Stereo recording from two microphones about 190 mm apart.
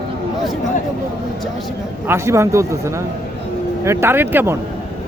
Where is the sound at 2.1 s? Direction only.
15° right (ahead or behind).